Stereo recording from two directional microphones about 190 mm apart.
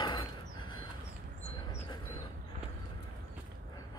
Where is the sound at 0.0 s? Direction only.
25° left (ahead or behind).